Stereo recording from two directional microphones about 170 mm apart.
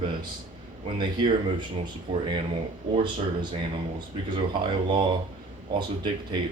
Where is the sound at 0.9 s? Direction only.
30° right (ahead or behind).